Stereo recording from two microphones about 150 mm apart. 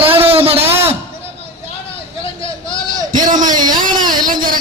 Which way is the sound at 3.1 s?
60° right (ahead or behind).